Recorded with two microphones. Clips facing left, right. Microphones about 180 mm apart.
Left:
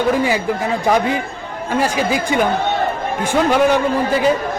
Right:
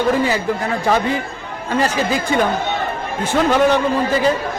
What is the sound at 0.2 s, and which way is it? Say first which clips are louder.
A man's voice: left 1 dB; 15° left (ahead or behind).